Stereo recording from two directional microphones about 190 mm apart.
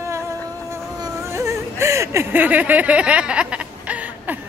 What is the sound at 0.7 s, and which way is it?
Whimper, 15° right (ahead or behind).